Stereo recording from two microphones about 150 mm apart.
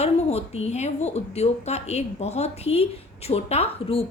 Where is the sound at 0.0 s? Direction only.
45° left (ahead or behind).